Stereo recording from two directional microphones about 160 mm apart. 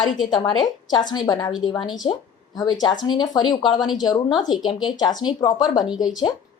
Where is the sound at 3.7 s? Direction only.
Centre (ahead or behind).